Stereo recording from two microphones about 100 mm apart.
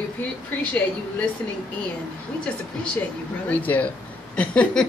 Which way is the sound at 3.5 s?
15° left (ahead or behind).